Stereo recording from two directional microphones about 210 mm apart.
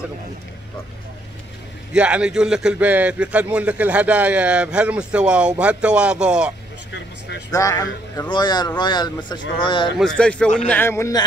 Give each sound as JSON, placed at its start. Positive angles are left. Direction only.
{"t": 2.0, "sound": "a man's voice", "side_deg": -5}
{"t": 6.9, "sound": "a sound", "side_deg": 55}
{"t": 7.5, "sound": "a man's voice", "side_deg": 15}
{"t": 9.9, "sound": "a man's voice", "side_deg": 5}